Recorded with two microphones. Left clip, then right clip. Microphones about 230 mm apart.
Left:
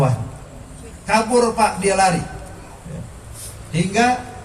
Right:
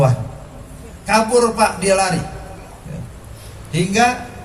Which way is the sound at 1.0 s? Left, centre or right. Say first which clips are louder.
Right 2 dB; right.